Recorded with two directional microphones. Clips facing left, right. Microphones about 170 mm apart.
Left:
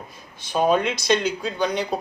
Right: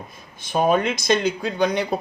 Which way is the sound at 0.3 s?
50° right (ahead or behind).